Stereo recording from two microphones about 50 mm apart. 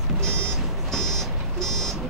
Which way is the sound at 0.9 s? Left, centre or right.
Centre.